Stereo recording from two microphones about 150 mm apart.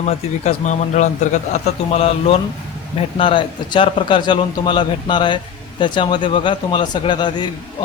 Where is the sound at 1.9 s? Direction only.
40° left (ahead or behind).